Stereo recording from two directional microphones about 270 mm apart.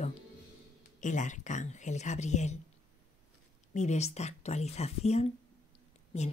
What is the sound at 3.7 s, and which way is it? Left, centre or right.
Speech, left.